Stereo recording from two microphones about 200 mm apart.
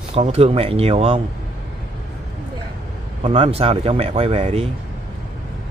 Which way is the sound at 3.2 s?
30° right (ahead or behind).